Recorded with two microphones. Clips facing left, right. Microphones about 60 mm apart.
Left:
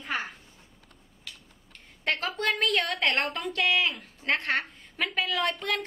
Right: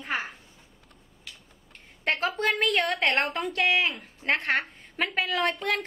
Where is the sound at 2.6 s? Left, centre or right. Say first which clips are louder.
Right 1 dB; right.